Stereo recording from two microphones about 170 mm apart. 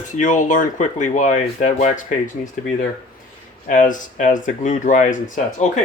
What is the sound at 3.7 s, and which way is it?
Speech, 50° left (ahead or behind).